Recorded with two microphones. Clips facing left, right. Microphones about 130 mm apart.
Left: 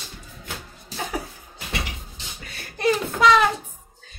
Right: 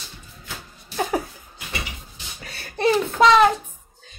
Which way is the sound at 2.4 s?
30° right (ahead or behind).